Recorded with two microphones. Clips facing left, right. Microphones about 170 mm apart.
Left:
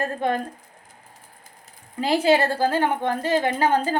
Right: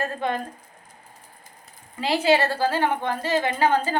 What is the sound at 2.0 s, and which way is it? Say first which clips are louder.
A woman's voice: left 1 dB; 45° left (ahead or behind).